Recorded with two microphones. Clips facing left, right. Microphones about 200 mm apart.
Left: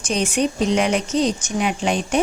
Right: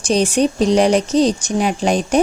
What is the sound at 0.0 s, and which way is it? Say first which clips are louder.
A woman's voice: right 5 dB; 35° right (ahead or behind).